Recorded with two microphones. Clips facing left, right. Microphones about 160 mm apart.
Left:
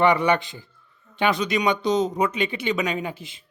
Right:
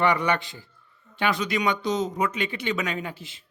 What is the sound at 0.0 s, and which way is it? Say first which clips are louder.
Speech: left 4 dB; 20° left (ahead or behind).